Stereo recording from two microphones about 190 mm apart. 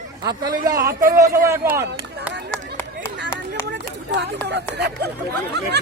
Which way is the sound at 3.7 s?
65° right (ahead or behind).